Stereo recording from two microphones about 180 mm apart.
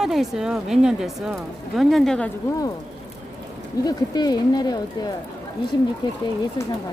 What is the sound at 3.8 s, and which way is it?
Speech, 20° left (ahead or behind).